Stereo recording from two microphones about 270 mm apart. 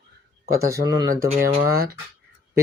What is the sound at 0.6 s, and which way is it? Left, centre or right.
Speech, centre.